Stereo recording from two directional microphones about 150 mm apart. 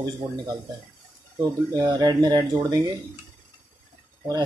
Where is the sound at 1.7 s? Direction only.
25° right (ahead or behind).